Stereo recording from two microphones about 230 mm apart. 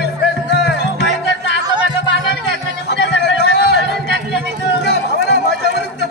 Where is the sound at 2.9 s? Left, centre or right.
Left.